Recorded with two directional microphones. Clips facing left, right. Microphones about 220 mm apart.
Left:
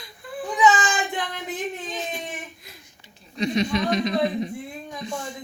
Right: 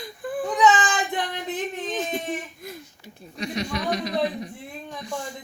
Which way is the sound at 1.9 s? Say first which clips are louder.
Right 5 dB; 50° right (ahead or behind).